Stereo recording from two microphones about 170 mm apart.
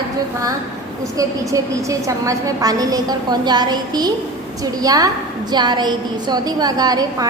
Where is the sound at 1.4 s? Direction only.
20° right (ahead or behind).